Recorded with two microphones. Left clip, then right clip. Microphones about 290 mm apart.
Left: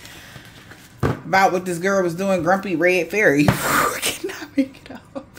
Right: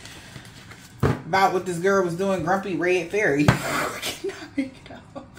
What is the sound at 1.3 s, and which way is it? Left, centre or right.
Speech, left.